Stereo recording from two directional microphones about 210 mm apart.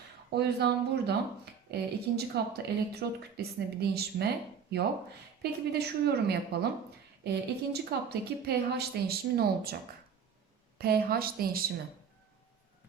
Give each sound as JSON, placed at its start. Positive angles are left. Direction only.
{"t": 0.3, "sound": "speech", "side_deg": -50}
{"t": 10.8, "sound": "speech", "side_deg": -50}